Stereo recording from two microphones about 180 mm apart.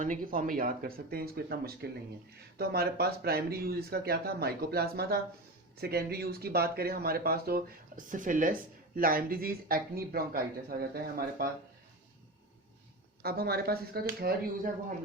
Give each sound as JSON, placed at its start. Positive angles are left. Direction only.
{"t": 0.0, "sound": "speech", "side_deg": -50}
{"t": 13.2, "sound": "speech", "side_deg": -60}